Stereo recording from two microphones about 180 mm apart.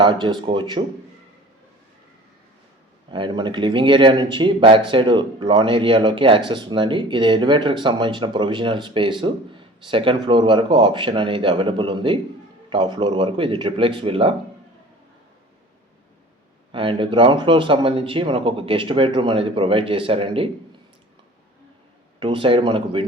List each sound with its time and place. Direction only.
0.0 s speech: 25° right (ahead or behind)
3.1 s speech: 25° right (ahead or behind)
16.7 s speech: 30° right (ahead or behind)
22.2 s speech: 30° right (ahead or behind)